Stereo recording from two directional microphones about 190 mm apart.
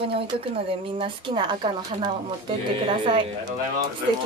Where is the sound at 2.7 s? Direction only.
25° right (ahead or behind).